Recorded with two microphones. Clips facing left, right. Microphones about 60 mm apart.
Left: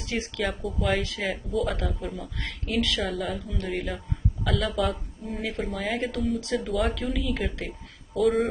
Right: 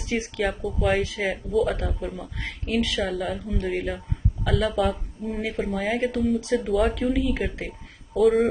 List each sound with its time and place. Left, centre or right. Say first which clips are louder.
0.0 s speech: right 3 dB; centre
0.4 s speech: right 4 dB; centre
2.4 s speech: right 2 dB; centre
3.0 s speech: right 3 dB; centre
3.3 s speech: right 4 dB; centre
3.7 s speech: right 3 dB; centre
6.4 s speech: right 4 dB; right
6.7 s speech: right 6 dB; centre